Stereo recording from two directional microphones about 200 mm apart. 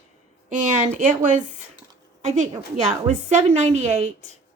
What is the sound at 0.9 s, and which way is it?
A woman's voice, 40° right (ahead or behind).